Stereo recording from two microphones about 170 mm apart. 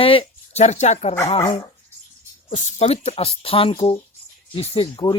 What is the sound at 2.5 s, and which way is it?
Speech, 35° left (ahead or behind).